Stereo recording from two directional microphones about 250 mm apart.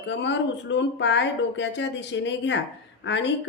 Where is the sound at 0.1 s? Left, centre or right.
Left.